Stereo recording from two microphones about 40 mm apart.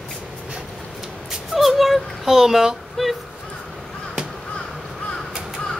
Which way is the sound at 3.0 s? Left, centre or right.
Centre.